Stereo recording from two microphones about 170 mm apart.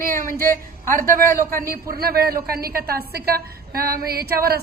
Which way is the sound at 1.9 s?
65° right (ahead or behind).